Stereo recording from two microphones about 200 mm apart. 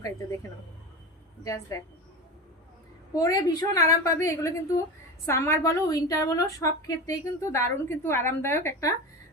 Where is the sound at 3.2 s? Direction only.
20° left (ahead or behind).